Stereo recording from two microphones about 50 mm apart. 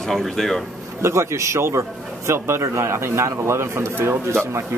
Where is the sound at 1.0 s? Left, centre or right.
Right.